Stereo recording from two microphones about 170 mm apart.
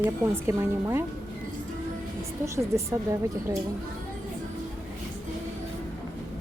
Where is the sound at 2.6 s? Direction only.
20° right (ahead or behind).